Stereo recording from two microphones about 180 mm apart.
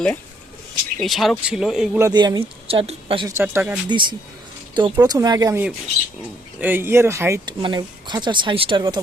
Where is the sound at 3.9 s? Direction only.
25° right (ahead or behind).